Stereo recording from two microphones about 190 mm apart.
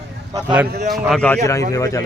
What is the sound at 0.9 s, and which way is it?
Speech, centre (ahead or behind).